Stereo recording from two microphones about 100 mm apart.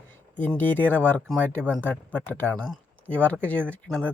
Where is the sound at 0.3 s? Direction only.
20° left (ahead or behind).